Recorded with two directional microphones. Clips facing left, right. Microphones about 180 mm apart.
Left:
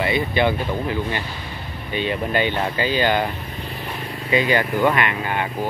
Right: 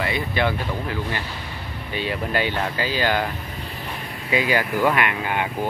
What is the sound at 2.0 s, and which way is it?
Speech, 5° right (ahead or behind).